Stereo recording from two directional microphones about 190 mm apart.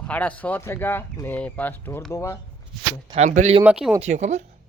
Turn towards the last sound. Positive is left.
turn(degrees=-35)  # may be behind; listen again after turning